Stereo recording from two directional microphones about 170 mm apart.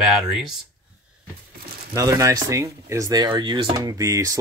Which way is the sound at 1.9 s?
20° right (ahead or behind).